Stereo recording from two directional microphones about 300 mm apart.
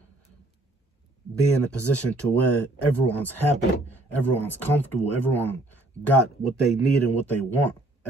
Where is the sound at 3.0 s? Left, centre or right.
Centre.